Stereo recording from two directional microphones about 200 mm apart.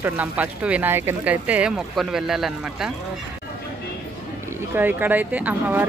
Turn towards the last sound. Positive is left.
turn(degrees=-10)  # may be behind; listen again after turning